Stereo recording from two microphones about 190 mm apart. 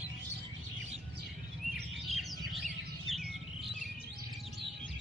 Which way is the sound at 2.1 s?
Centre (ahead or behind).